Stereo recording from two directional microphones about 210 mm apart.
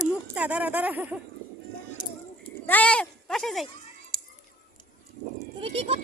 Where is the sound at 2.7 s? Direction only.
5° left (ahead or behind).